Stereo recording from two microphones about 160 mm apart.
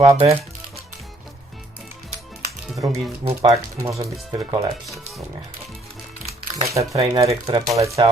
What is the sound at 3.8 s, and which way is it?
Speech, 20° right (ahead or behind).